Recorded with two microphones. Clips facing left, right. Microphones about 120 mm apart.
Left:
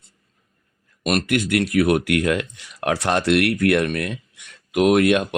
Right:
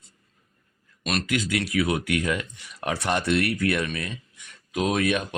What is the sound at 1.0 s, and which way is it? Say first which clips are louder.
Speech: left 6 dB; 55° left (ahead or behind).